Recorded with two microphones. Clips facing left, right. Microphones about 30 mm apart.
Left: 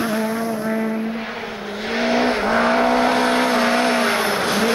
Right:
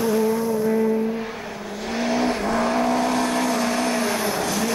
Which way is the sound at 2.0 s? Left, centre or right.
Left.